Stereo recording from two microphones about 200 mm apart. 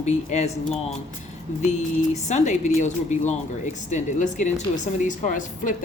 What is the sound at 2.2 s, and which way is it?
Speech, 35° left (ahead or behind).